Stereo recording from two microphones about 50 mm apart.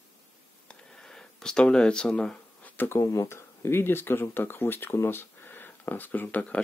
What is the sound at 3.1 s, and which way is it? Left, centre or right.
Speech, left.